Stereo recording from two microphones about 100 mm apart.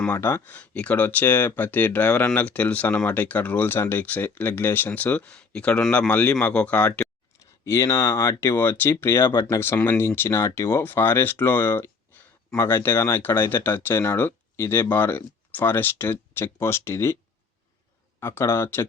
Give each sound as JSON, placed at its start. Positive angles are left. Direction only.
{"t": 0.1, "sound": "speech", "side_deg": 25}
{"t": 7.3, "sound": "speech", "side_deg": 30}
{"t": 18.2, "sound": "speech", "side_deg": 25}